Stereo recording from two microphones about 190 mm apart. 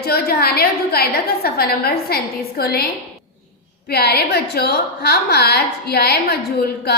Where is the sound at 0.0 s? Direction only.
55° left (ahead or behind).